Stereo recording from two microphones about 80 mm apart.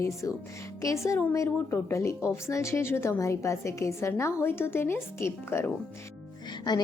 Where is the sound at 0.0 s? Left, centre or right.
Left.